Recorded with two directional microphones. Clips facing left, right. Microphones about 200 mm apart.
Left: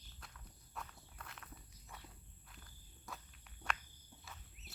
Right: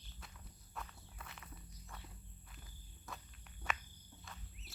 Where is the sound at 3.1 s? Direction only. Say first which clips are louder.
Even; centre (ahead or behind).